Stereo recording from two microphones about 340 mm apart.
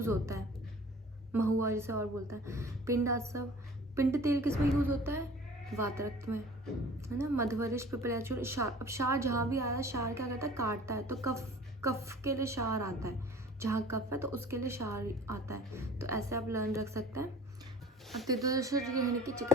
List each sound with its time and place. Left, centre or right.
0.0 s a woman's voice: centre
18.3 s speech: centre